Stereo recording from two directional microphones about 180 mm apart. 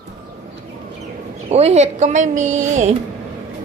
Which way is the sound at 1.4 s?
35° right (ahead or behind).